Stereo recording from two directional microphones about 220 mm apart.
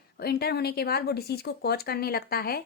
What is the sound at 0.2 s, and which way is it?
A woman's voice, 45° left (ahead or behind).